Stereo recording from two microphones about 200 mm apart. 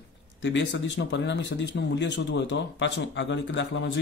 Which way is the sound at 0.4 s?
65° left (ahead or behind).